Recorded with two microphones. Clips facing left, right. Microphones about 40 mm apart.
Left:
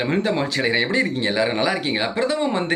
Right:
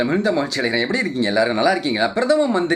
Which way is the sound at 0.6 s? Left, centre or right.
Centre.